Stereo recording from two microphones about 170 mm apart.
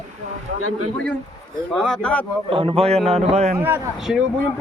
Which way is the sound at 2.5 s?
30° right (ahead or behind).